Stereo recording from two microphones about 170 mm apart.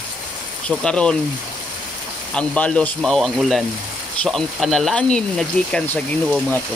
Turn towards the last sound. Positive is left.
turn(degrees=10)  # may be behind; listen again after turning